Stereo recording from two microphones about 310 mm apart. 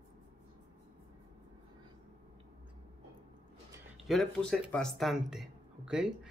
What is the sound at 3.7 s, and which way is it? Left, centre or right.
Speech, centre.